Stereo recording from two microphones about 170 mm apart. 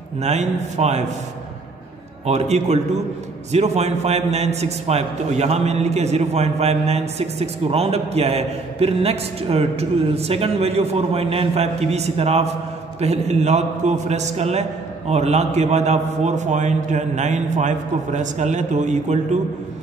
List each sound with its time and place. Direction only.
0.2 s a man's voice: 40° right (ahead or behind)
2.2 s a man's voice: 40° right (ahead or behind)